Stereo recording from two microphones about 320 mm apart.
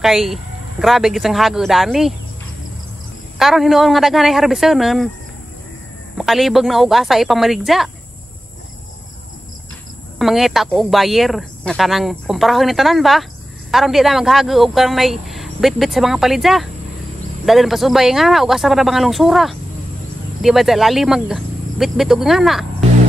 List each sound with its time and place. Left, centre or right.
0.0 s speech: centre
3.3 s speech: centre
6.1 s speech: centre
10.1 s speech: centre